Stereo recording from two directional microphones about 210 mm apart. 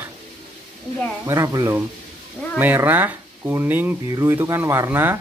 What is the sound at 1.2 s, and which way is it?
Speech, 15° right (ahead or behind).